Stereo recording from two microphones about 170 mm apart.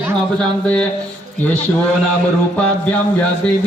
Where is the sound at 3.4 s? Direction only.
5° left (ahead or behind).